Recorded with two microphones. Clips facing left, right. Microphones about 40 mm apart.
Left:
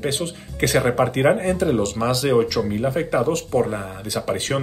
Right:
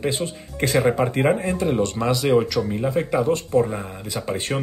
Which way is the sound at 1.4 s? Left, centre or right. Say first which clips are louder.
Left 3 dB; right.